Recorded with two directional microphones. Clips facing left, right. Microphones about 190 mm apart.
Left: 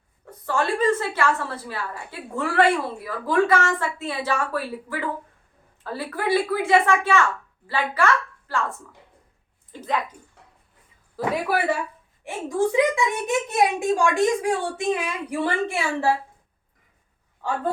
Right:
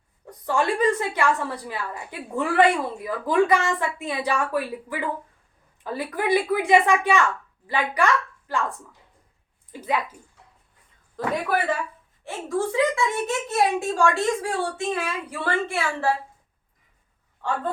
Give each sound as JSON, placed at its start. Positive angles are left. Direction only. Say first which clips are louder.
{"t": 0.3, "sound": "a woman's voice", "louder": "right 1 dB", "side_deg": -15}
{"t": 9.7, "sound": "a woman's voice", "louder": "even", "side_deg": -10}
{"t": 11.4, "sound": "a woman's voice", "louder": "left 1 dB", "side_deg": 10}